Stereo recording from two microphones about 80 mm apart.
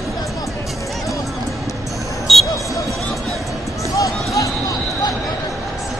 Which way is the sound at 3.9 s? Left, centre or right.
Left.